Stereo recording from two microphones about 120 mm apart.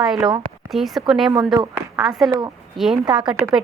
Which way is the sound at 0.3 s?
40° right (ahead or behind).